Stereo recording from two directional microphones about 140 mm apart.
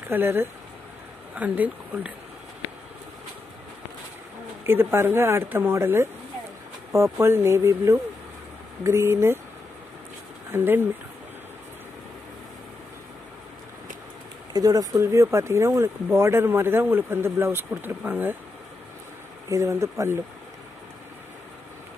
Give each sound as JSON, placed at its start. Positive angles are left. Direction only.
{"t": 0.1, "sound": "speech", "side_deg": -15}
{"t": 4.6, "sound": "speech", "side_deg": -15}
{"t": 10.5, "sound": "speech", "side_deg": -15}
{"t": 14.5, "sound": "speech", "side_deg": -25}
{"t": 19.5, "sound": "speech", "side_deg": -20}